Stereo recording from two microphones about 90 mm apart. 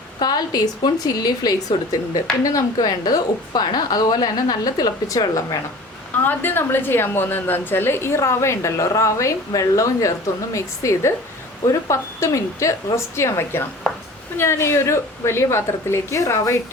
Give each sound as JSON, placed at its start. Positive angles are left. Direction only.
{"t": 0.2, "sound": "a woman's voice", "side_deg": 50}
{"t": 6.2, "sound": "a woman's voice", "side_deg": 25}